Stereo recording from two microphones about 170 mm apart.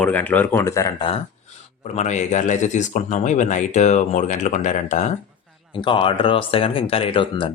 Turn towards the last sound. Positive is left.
turn(degrees=30)  # may be behind; listen again after turning